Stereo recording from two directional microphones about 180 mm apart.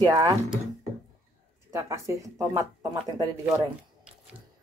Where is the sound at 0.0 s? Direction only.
20° right (ahead or behind).